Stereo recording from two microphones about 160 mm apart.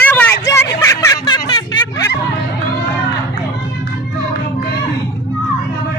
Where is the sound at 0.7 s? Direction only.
20° left (ahead or behind).